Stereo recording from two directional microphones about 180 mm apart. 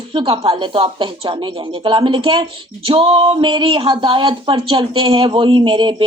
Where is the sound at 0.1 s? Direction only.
30° right (ahead or behind).